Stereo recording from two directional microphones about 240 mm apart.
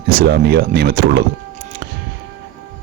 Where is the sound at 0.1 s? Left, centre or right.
Right.